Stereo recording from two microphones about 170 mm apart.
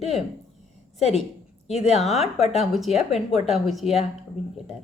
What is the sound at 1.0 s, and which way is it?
A woman's voice, 40° left (ahead or behind).